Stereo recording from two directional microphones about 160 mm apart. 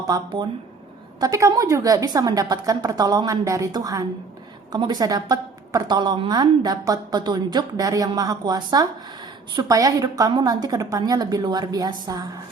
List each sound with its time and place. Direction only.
0.0 s a woman's voice: 25° right (ahead or behind)